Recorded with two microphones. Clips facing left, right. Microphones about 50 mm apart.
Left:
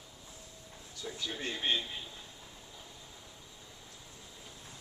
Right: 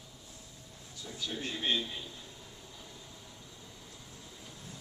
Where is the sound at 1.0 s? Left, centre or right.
Left.